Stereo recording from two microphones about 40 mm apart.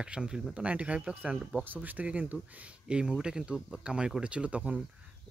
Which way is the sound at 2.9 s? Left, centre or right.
Right.